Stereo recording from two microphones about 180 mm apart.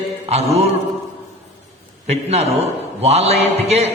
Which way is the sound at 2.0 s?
35° right (ahead or behind).